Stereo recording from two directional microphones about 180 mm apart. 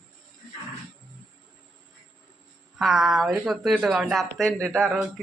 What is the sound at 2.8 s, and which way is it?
Speech, centre (ahead or behind).